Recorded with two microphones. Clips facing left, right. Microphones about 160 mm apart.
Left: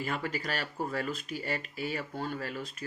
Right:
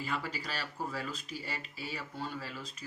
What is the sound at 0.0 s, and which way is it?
Speech, 50° left (ahead or behind).